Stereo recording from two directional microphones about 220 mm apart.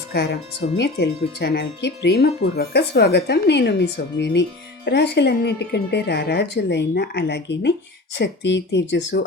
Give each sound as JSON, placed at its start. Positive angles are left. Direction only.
{"t": 0.1, "sound": "speech", "side_deg": 45}